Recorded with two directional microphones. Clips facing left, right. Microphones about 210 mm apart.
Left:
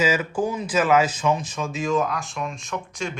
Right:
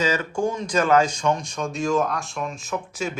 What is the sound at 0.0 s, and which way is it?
Speech, 5° left (ahead or behind).